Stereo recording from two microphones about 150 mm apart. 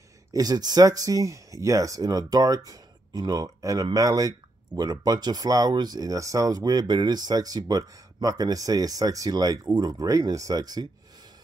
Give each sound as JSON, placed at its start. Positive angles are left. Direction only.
{"t": 0.3, "sound": "speech", "side_deg": -25}